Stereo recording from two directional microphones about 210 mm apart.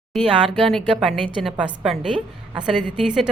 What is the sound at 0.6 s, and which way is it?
Speech, centre (ahead or behind).